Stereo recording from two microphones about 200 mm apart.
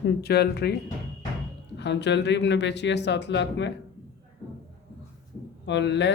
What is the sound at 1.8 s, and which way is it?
Speech, 60° left (ahead or behind).